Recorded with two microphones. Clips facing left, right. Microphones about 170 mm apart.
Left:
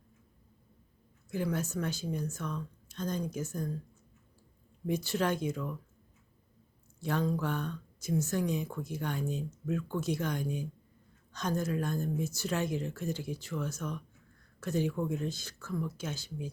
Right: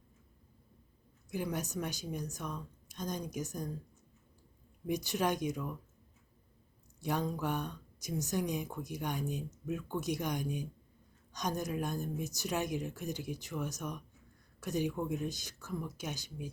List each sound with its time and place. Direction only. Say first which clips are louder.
1.3 s speech: left 3 dB; 15° right (ahead or behind)
4.9 s speech: left 2 dB; 15° right (ahead or behind)
7.0 s speech: left 3 dB; 15° right (ahead or behind)